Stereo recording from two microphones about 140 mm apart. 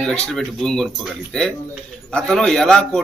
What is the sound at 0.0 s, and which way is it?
A man's voice, 5° left (ahead or behind).